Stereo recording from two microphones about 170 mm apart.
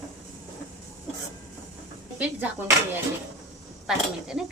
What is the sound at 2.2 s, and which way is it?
Speech, 10° right (ahead or behind).